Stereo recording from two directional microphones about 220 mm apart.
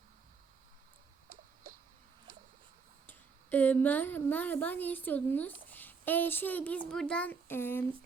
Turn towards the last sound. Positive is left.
turn(degrees=10)  # may be behind; listen again after turning